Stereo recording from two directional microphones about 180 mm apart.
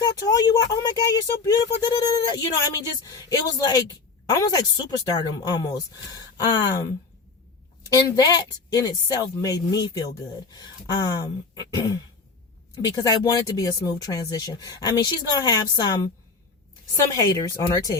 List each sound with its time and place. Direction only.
0.0 s speech: 20° left (ahead or behind)
7.9 s speech: 20° left (ahead or behind)
17.1 s speech: 20° left (ahead or behind)